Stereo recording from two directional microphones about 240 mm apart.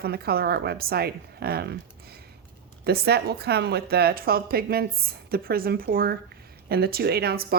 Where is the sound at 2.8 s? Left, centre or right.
Right.